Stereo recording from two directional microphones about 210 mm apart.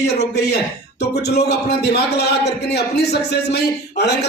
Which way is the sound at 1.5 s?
50° left (ahead or behind).